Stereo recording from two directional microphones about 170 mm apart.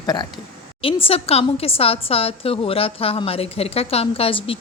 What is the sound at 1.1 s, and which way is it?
A woman's voice, 35° left (ahead or behind).